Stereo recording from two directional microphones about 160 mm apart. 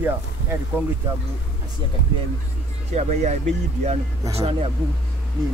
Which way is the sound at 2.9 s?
45° right (ahead or behind).